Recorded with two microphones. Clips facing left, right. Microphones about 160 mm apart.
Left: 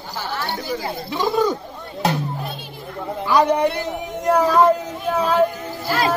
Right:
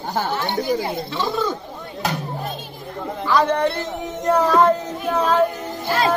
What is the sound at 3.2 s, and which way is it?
Speech, 15° left (ahead or behind).